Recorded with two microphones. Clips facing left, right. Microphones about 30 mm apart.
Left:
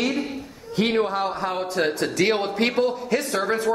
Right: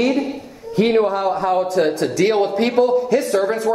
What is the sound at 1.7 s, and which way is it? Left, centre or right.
Speech, left.